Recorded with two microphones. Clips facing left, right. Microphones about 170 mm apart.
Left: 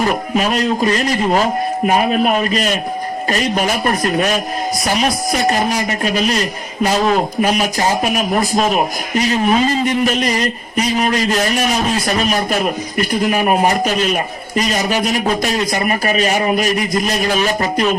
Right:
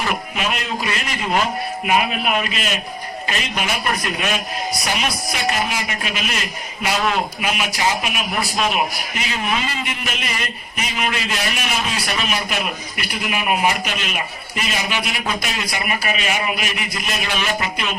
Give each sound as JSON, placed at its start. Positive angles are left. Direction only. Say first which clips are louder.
{"t": 0.0, "sound": "a man's voice", "louder": "left 7 dB", "side_deg": 40}